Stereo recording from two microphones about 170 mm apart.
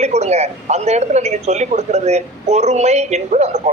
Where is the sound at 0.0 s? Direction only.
40° right (ahead or behind).